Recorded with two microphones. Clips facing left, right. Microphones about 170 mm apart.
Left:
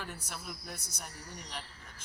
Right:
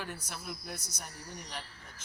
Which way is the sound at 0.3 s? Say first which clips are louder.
Right 2 dB; 5° right (ahead or behind).